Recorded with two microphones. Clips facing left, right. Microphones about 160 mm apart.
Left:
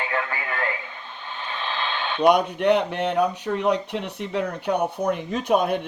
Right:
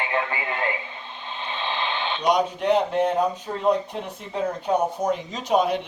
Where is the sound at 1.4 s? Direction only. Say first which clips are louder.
Right 1 dB; 20° right (ahead or behind).